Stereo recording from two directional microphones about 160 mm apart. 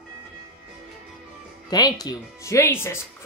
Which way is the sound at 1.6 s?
25° left (ahead or behind).